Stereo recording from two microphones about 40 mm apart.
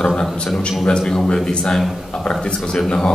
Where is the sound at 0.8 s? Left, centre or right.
Centre.